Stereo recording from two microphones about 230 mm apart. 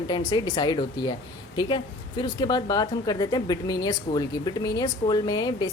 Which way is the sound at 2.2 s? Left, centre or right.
Centre.